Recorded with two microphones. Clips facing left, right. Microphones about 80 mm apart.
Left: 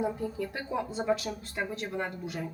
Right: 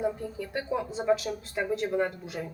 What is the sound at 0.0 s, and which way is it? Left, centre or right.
Speech, centre.